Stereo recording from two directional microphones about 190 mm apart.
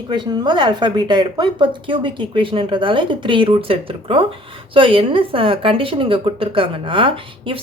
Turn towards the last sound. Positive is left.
turn(degrees=-25)  # may be behind; listen again after turning